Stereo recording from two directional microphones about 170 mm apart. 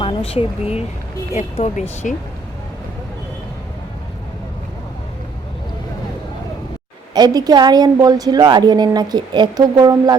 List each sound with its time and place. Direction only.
0.0 s speech: 35° left (ahead or behind)
7.1 s a woman's voice: 25° right (ahead or behind)